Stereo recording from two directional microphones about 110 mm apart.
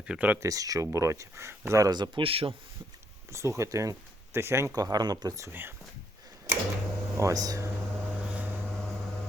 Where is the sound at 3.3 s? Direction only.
25° right (ahead or behind).